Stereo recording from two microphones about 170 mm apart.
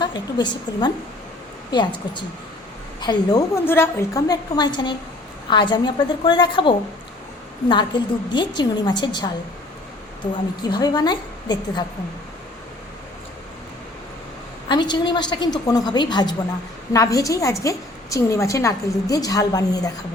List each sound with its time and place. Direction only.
0.0 s a woman's voice: 25° left (ahead or behind)
3.0 s a woman's voice: 25° left (ahead or behind)
14.7 s a woman's voice: 25° left (ahead or behind)